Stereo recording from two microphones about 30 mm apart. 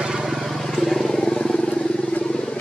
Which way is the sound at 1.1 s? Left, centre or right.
Left.